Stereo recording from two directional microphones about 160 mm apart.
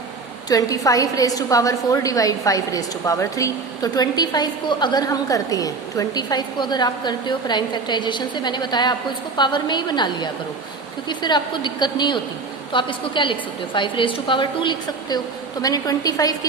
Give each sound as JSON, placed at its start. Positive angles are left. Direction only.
{"t": 0.4, "sound": "a woman's voice", "side_deg": 25}